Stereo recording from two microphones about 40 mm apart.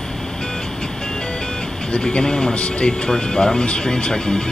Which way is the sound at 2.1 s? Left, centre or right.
Centre.